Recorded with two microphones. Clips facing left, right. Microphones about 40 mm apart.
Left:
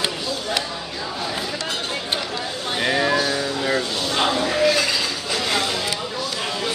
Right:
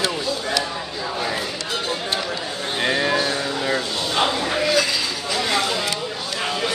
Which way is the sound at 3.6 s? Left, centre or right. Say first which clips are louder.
Left 1 dB; centre.